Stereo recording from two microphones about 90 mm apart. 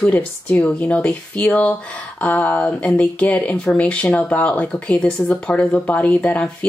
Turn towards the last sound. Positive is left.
turn(degrees=15)  # may be behind; listen again after turning